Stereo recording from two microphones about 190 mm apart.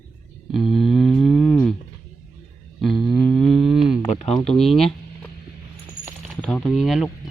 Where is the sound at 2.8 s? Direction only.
Centre (ahead or behind).